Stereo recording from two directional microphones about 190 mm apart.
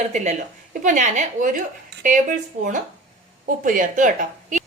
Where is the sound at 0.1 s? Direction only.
40° right (ahead or behind).